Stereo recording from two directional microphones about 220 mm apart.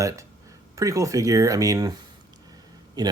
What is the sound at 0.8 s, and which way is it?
Speech, 15° right (ahead or behind).